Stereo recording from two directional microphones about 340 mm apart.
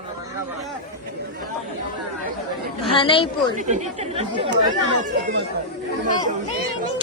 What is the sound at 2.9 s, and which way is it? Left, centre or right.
Speech, centre.